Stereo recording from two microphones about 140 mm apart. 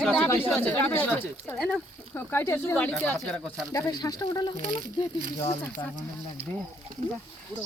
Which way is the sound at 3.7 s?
25° left (ahead or behind).